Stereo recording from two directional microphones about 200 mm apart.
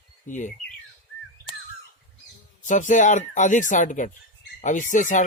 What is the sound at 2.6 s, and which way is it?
Speech, 40° left (ahead or behind).